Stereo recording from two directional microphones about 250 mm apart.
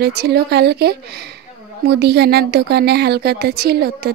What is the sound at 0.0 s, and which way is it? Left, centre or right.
Speech, right.